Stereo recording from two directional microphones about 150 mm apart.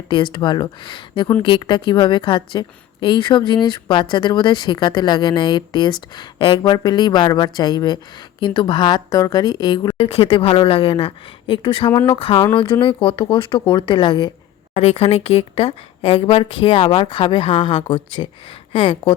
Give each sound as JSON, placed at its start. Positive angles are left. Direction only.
{"t": 0.1, "sound": "a woman's voice", "side_deg": 35}
{"t": 10.0, "sound": "a woman's voice", "side_deg": 40}
{"t": 14.7, "sound": "a woman's voice", "side_deg": 45}